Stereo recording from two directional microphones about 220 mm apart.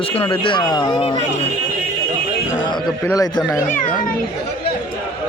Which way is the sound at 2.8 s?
15° left (ahead or behind).